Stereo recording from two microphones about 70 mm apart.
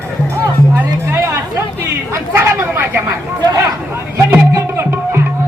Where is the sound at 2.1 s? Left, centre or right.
Right.